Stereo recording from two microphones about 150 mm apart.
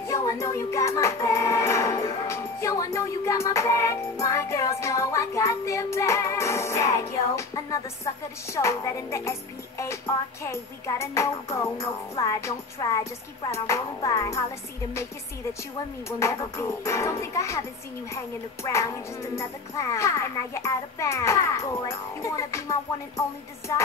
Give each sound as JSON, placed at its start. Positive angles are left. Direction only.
{"t": 0.0, "sound": "music", "side_deg": 20}
{"t": 10.4, "sound": "speech", "side_deg": 20}
{"t": 16.5, "sound": "speech", "side_deg": 20}